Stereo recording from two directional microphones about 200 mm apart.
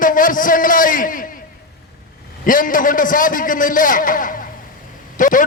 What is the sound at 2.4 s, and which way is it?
A man's voice, 40° left (ahead or behind).